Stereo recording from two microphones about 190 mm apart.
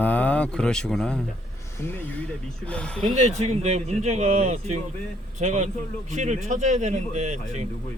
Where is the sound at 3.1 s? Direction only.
35° right (ahead or behind).